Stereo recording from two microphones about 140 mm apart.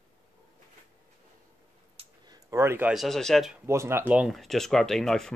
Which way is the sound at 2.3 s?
20° right (ahead or behind).